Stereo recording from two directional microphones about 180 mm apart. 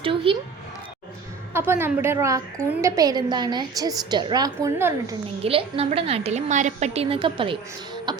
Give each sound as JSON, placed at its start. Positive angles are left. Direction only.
{"t": 0.0, "sound": "a sound", "side_deg": -30}
{"t": 1.5, "sound": "a woman's voice", "side_deg": -10}
{"t": 5.4, "sound": "a woman's voice", "side_deg": -30}